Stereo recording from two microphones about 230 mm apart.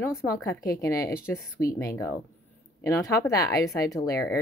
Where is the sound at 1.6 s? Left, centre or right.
Left.